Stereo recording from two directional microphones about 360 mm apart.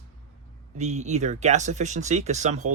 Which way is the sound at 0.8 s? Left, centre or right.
Centre.